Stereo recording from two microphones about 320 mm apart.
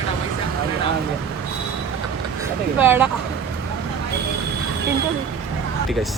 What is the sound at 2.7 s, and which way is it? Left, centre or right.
Speech, centre.